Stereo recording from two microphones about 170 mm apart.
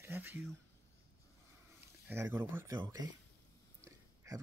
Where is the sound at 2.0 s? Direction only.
15° right (ahead or behind).